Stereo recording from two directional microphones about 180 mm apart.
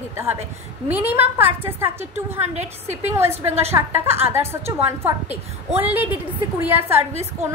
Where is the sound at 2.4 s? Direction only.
40° right (ahead or behind).